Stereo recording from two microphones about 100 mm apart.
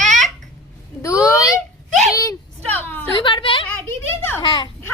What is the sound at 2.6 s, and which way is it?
Speech, 20° left (ahead or behind).